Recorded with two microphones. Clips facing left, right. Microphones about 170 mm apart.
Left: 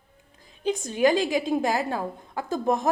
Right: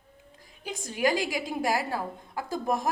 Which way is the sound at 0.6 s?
20° left (ahead or behind).